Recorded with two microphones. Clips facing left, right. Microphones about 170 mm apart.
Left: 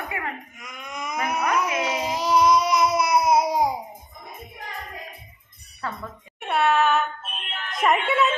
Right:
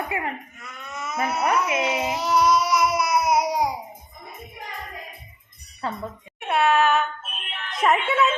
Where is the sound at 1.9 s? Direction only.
25° right (ahead or behind).